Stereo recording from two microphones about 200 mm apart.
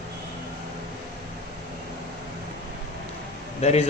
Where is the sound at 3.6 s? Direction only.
30° left (ahead or behind).